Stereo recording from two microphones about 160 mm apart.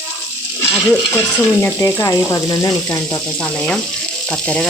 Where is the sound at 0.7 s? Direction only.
15° left (ahead or behind).